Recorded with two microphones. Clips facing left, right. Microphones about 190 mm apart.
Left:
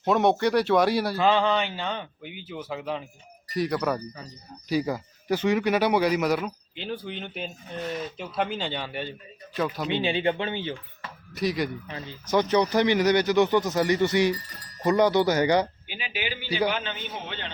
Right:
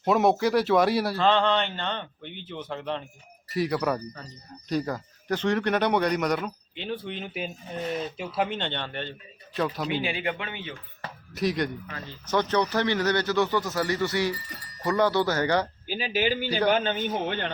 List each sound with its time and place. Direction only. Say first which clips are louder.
0.0 s a man's voice: even; centre (ahead or behind)
10.0 s speech: left 5 dB; 25° left (ahead or behind)
11.3 s a man's voice: even; centre (ahead or behind)
11.9 s speech: left 2 dB; 15° left (ahead or behind)
15.9 s speech: right 7 dB; 40° right (ahead or behind)